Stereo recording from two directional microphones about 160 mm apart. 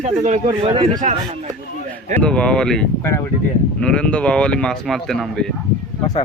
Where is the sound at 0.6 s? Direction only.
30° right (ahead or behind).